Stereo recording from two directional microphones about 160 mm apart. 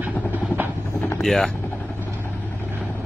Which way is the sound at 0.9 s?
10° left (ahead or behind).